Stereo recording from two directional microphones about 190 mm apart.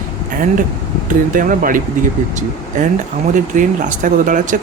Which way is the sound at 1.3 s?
45° right (ahead or behind).